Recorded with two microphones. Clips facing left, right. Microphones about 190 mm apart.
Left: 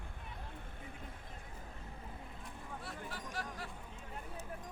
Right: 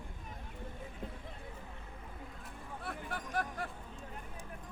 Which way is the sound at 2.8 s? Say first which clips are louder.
Right 6 dB; 55° right (ahead or behind).